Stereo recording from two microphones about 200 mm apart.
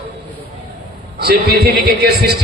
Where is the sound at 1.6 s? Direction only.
55° right (ahead or behind).